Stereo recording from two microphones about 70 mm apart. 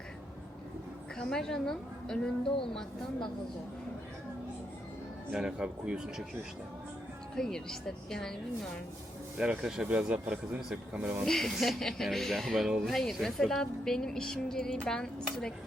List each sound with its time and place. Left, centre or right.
1.2 s a woman's voice: centre
5.3 s speech: centre
7.3 s a woman's voice: centre
9.4 s speech: centre
11.3 s a woman's voice: centre